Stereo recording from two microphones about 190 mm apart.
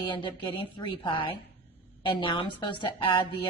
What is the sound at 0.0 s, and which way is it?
A woman's voice, 25° left (ahead or behind).